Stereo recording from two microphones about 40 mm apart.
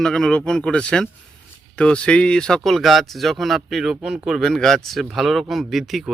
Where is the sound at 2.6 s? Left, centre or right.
Centre.